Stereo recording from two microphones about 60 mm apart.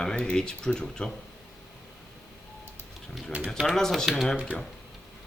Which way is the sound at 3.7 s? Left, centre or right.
Centre.